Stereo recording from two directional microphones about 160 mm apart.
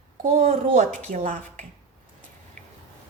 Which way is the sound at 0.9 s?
45° right (ahead or behind).